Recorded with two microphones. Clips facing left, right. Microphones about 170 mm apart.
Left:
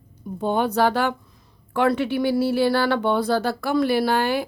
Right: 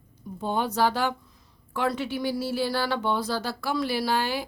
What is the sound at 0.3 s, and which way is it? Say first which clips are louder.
Speech: left 5 dB; 60° left (ahead or behind).